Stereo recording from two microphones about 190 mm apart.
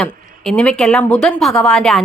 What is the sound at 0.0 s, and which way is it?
A woman's voice, 5° left (ahead or behind).